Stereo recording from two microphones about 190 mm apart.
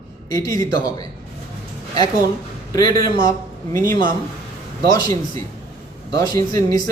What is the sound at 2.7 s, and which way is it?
Speech, 20° left (ahead or behind).